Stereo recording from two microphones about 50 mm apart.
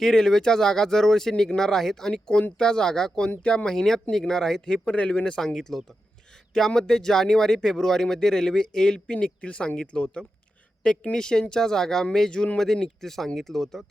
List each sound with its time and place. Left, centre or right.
0.0 s speech: centre
4.9 s speech: left
5.4 s speech: centre